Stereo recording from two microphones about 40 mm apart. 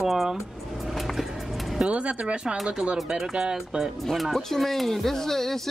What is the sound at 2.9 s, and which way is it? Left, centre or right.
Speech, centre.